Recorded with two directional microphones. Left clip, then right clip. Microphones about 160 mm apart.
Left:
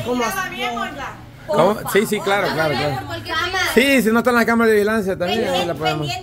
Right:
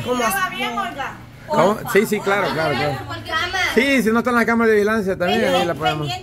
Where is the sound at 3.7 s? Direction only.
20° left (ahead or behind).